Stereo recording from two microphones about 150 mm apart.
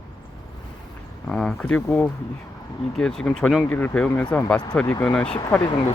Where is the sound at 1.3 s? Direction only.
5° left (ahead or behind).